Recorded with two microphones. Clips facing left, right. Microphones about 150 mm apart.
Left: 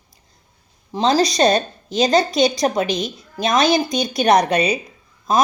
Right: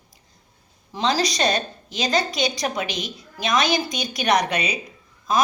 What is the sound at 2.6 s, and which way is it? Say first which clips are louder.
Speech: left 7 dB; 40° left (ahead or behind).